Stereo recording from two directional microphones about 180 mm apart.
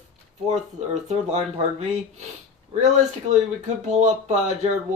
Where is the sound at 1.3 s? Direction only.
35° right (ahead or behind).